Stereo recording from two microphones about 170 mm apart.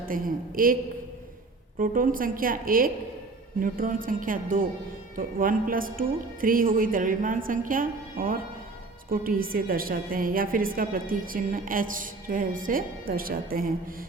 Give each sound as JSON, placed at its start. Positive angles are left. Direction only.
{"t": 0.0, "sound": "a woman's voice", "side_deg": -55}
{"t": 1.8, "sound": "a woman's voice", "side_deg": -55}